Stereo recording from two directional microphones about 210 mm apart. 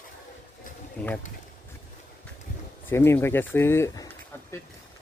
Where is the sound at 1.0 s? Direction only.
5° left (ahead or behind).